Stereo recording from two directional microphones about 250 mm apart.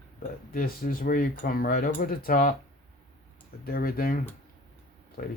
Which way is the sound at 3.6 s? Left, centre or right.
Left.